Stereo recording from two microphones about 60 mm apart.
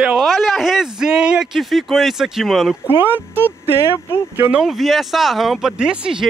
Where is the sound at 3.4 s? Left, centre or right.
Left.